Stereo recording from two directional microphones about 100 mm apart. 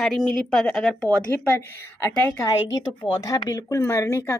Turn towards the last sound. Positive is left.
turn(degrees=25)  # may be behind; listen again after turning